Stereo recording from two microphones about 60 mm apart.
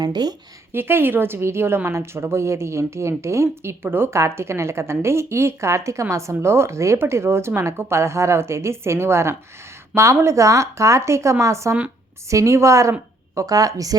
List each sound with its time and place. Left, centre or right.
0.7 s a woman's voice: right
3.8 s a woman's voice: right
4.1 s speech: right
13.3 s a woman's voice: right